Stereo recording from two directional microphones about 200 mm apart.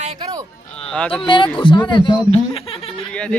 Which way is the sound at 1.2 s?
25° left (ahead or behind).